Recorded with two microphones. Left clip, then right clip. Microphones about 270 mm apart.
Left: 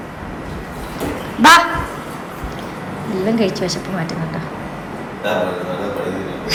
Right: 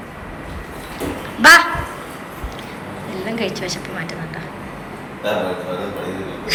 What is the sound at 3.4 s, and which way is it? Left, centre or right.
Speech, centre.